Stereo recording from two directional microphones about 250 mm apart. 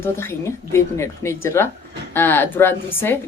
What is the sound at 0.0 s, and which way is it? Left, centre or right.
Speech, centre.